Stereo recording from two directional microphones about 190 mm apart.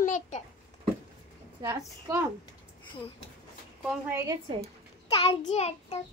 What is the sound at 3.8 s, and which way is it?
Speech, 5° right (ahead or behind).